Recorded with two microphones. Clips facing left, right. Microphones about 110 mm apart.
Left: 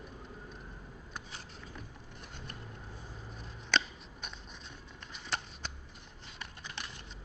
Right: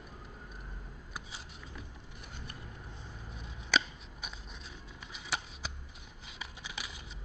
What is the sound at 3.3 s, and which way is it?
Scissors, centre (ahead or behind).